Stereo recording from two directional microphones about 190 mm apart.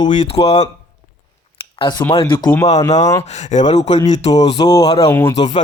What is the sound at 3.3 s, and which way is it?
Speech, 40° left (ahead or behind).